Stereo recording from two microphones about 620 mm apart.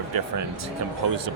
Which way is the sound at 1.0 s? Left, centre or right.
Right.